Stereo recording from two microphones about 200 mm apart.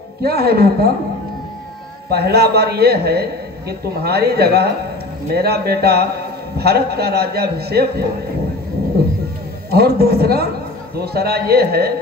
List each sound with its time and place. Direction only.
0.2 s a man's voice: 50° right (ahead or behind)
2.0 s a man's voice: 50° right (ahead or behind)
9.7 s a man's voice: 50° right (ahead or behind)